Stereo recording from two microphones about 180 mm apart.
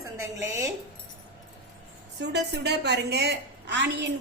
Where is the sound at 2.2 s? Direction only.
70° right (ahead or behind).